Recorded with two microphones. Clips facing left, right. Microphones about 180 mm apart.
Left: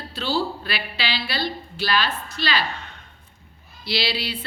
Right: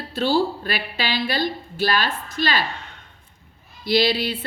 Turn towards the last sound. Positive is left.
turn(degrees=-50)  # may be behind; listen again after turning